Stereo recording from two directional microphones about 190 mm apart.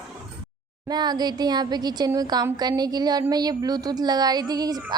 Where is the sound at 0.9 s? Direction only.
20° right (ahead or behind).